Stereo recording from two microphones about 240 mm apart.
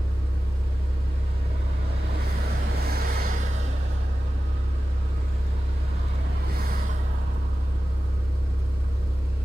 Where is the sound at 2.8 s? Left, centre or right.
Right.